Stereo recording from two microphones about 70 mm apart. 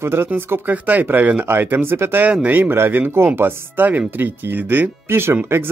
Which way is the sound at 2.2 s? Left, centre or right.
Right.